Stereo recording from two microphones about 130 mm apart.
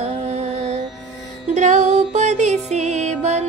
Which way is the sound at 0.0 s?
60° right (ahead or behind).